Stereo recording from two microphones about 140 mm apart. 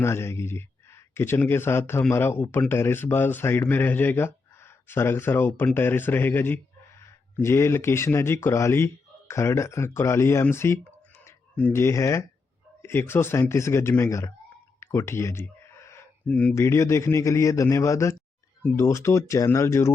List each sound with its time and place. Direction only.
0.0 s speech: 20° left (ahead or behind)
14.8 s a sound: 20° left (ahead or behind)
16.6 s speech: 20° left (ahead or behind)